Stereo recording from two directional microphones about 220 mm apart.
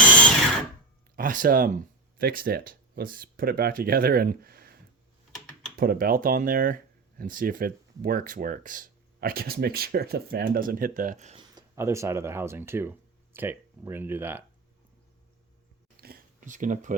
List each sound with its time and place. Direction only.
1.1 s speech: 40° right (ahead or behind)
5.7 s speech: 40° right (ahead or behind)
11.5 s speech: 15° right (ahead or behind)
16.0 s a sound: 40° right (ahead or behind)